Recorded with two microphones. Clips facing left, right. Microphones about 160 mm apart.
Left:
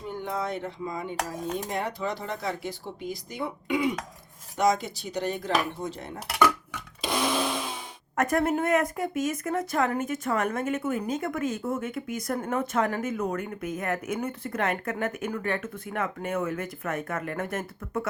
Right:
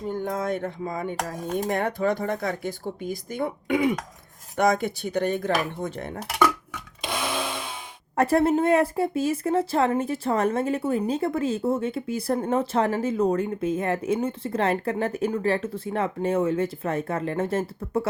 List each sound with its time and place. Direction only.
0.1 s speech: 45° right (ahead or behind)
8.1 s speech: 30° right (ahead or behind)